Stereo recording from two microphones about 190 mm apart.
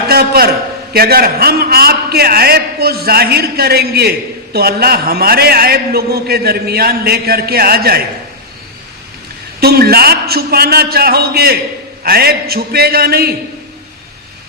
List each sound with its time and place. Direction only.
0.1 s a man's voice: 55° right (ahead or behind)
9.6 s a man's voice: 55° right (ahead or behind)